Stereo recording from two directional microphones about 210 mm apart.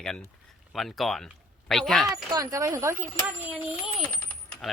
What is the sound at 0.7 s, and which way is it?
Speech, centre (ahead or behind).